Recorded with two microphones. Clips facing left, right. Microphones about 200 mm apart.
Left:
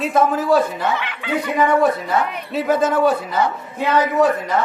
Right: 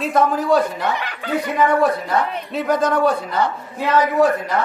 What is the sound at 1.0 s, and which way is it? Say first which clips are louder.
Speech: even; 40° right (ahead or behind).